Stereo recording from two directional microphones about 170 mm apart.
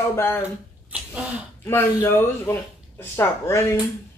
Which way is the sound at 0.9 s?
5° right (ahead or behind).